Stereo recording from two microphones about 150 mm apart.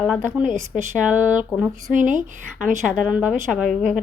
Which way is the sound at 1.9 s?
60° right (ahead or behind).